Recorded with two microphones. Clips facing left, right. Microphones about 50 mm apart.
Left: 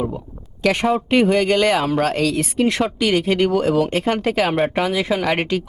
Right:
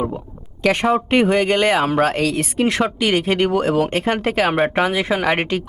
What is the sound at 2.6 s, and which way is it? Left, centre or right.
Speech, centre.